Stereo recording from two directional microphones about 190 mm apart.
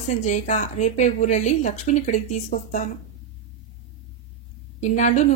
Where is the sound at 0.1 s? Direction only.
40° left (ahead or behind).